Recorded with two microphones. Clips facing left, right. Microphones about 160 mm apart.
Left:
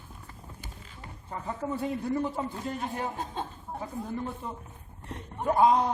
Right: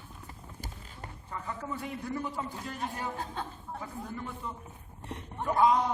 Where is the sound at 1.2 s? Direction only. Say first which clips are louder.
Left 5 dB; 30° left (ahead or behind).